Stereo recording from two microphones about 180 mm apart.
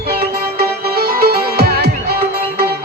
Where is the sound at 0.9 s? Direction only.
55° right (ahead or behind).